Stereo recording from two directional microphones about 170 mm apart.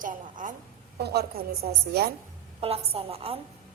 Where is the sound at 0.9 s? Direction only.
70° right (ahead or behind).